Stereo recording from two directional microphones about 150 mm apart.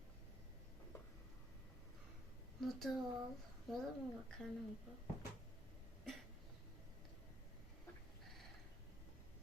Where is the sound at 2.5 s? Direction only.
Centre (ahead or behind).